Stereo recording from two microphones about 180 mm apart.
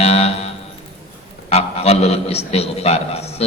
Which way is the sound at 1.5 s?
35° left (ahead or behind).